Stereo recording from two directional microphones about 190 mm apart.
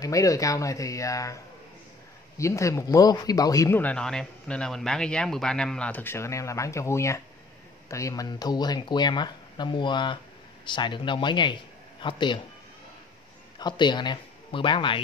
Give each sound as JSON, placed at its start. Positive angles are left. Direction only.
{"t": 0.0, "sound": "speech", "side_deg": 15}
{"t": 13.6, "sound": "speech", "side_deg": 20}